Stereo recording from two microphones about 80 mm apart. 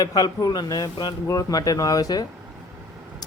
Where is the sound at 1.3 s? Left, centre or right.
Left.